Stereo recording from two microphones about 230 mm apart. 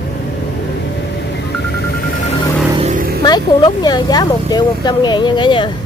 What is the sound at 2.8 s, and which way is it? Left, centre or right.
Vehicle, right.